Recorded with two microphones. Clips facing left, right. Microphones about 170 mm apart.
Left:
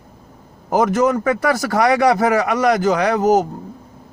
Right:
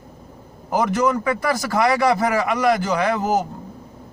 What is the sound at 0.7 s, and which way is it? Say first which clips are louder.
A man's voice: left 4 dB; 45° left (ahead or behind).